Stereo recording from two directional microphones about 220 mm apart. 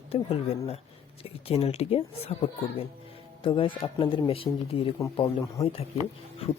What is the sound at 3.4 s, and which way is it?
Speech, 25° left (ahead or behind).